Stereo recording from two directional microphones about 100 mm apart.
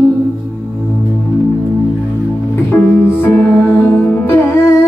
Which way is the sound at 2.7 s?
20° left (ahead or behind).